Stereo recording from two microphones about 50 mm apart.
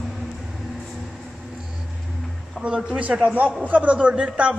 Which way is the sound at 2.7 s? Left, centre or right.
Centre.